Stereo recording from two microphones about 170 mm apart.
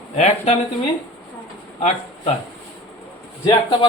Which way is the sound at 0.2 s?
40° left (ahead or behind).